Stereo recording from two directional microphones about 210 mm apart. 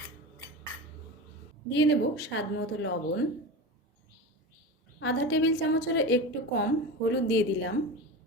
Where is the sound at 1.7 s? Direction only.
60° left (ahead or behind).